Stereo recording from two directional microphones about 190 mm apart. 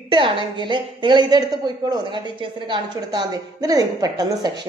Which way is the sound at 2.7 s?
20° right (ahead or behind).